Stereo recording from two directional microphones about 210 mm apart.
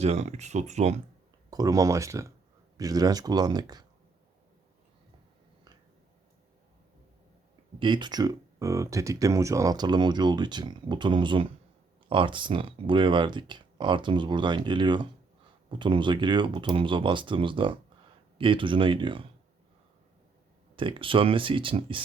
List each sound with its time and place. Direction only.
0.0 s speech: 30° right (ahead or behind)
1.5 s speech: 15° right (ahead or behind)
7.8 s speech: 20° right (ahead or behind)
20.7 s speech: 25° right (ahead or behind)